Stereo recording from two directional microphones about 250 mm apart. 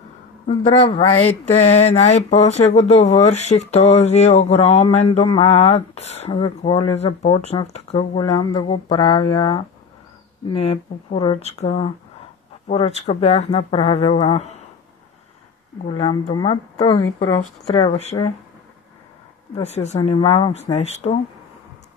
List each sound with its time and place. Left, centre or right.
0.7 s speech: left
15.9 s speech: centre
19.5 s speech: left